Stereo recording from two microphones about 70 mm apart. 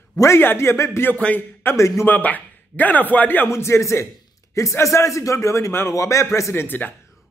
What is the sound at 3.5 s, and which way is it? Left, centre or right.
A man's voice, left.